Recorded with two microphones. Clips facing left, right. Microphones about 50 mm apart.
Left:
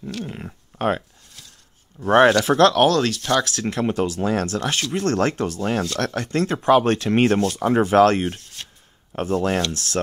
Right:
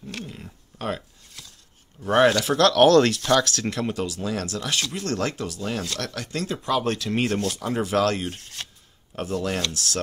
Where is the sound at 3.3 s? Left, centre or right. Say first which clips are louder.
Left 2 dB; centre.